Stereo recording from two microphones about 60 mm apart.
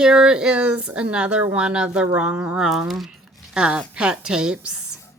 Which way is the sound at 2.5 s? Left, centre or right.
Centre.